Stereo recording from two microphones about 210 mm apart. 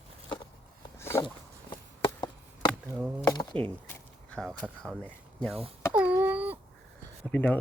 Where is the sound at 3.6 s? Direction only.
5° left (ahead or behind).